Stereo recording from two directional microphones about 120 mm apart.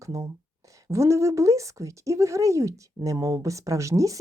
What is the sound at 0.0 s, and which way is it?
Speech, 25° right (ahead or behind).